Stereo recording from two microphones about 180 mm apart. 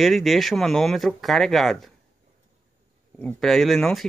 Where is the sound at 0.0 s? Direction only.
Centre (ahead or behind).